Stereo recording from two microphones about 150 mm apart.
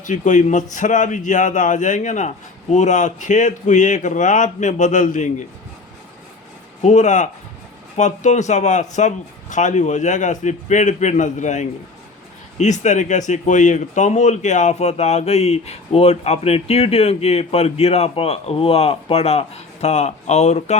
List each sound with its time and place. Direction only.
0.0 s speech: 55° left (ahead or behind)
6.8 s speech: 50° left (ahead or behind)